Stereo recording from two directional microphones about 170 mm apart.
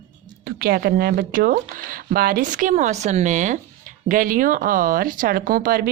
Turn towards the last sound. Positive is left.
turn(degrees=-55)  # may be behind; listen again after turning